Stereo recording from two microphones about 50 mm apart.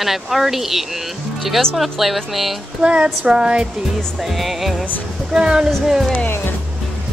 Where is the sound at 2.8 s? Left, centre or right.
Right.